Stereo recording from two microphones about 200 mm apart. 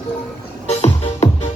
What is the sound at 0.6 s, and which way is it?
Music, 30° left (ahead or behind).